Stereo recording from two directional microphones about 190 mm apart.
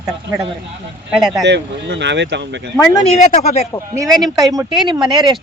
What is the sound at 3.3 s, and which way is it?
Speech, 35° left (ahead or behind).